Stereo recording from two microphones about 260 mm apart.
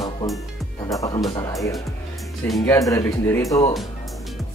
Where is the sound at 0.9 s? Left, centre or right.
Centre.